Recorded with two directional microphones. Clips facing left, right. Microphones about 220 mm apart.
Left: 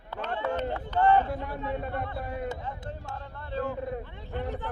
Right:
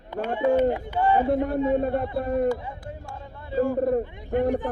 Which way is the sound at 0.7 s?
10° right (ahead or behind).